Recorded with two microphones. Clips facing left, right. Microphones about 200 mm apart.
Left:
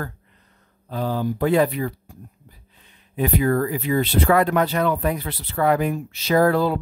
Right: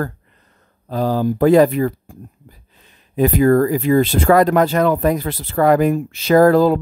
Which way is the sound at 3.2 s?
45° right (ahead or behind).